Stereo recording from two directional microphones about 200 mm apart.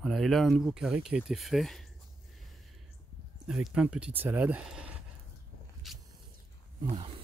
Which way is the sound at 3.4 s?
5° right (ahead or behind).